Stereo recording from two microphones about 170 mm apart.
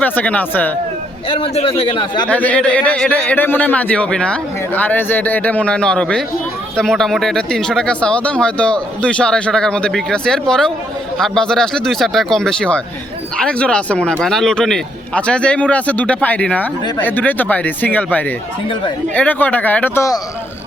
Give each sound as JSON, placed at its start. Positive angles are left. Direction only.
{"t": 0.0, "sound": "speech", "side_deg": 10}
{"t": 1.3, "sound": "speech", "side_deg": 35}
{"t": 2.2, "sound": "speech", "side_deg": 10}